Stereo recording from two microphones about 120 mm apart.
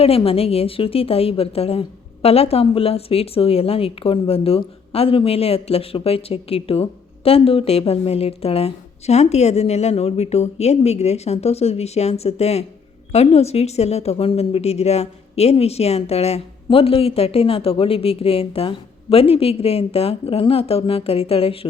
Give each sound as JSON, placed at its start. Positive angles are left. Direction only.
{"t": 0.3, "sound": "a woman's voice", "side_deg": 55}